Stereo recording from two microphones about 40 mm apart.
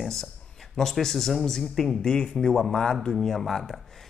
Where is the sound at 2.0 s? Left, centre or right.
Centre.